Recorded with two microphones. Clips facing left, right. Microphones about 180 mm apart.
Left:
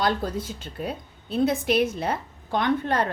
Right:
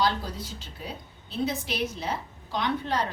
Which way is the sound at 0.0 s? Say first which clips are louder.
Left 3 dB; 50° left (ahead or behind).